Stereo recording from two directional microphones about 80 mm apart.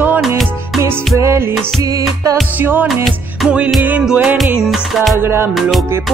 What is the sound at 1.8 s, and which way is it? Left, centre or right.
Music, right.